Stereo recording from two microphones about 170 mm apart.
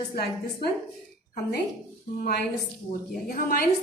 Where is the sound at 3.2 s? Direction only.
55° left (ahead or behind).